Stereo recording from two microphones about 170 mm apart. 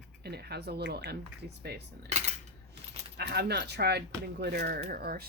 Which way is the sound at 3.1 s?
70° right (ahead or behind).